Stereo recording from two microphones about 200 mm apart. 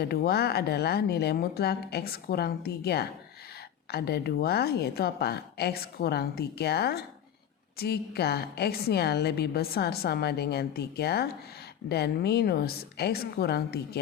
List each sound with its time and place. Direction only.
0.0 s a woman's voice: 50° left (ahead or behind)